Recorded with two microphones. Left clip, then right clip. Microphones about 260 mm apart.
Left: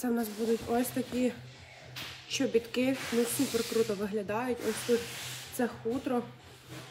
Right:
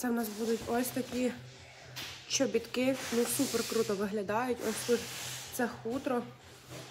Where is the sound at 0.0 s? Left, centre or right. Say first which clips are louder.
Left 2 dB; centre.